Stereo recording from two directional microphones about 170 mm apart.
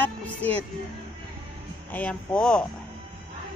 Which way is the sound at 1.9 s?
10° left (ahead or behind).